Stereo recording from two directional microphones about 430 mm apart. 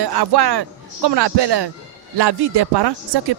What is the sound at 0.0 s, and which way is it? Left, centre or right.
Speech, right.